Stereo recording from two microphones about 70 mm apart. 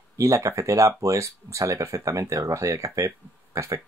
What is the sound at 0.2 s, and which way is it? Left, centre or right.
Speech, right.